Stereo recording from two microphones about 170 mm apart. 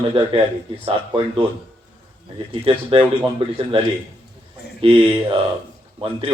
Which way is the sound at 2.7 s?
30° right (ahead or behind).